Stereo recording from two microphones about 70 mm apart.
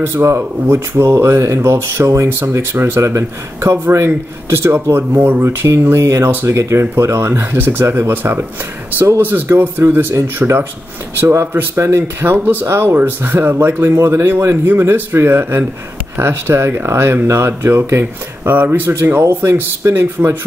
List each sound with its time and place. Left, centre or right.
0.0 s speech: right